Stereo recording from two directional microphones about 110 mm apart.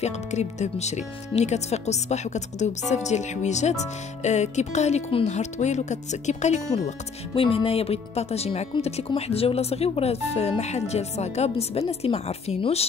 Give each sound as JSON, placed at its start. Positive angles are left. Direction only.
{"t": 0.0, "sound": "speech", "side_deg": 90}
{"t": 7.3, "sound": "speech", "side_deg": 60}